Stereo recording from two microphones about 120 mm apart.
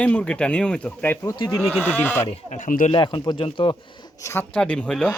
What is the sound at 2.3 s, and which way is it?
Speech, 85° left.